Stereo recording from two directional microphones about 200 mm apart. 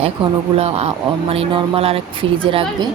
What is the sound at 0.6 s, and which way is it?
Speech, 30° right (ahead or behind).